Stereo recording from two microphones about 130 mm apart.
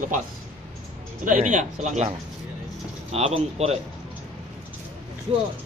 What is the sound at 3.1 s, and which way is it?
Speech, 50° right (ahead or behind).